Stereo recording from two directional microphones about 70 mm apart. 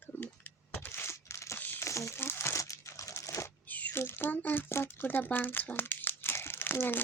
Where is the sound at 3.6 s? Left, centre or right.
Left.